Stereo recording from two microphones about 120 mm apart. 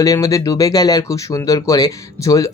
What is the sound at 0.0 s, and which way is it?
Speech, 25° left (ahead or behind).